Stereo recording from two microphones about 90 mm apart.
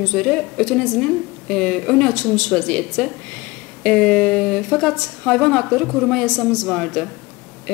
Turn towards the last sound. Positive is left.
turn(degrees=10)  # may be behind; listen again after turning